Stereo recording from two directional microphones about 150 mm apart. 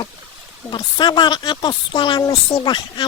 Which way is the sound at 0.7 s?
30° left (ahead or behind).